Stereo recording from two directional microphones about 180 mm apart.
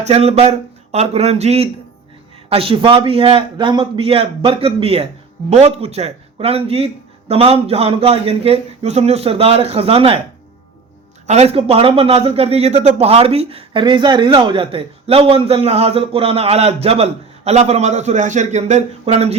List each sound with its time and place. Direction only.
0.0 s a man's voice: 35° right (ahead or behind)
11.3 s a man's voice: 35° right (ahead or behind)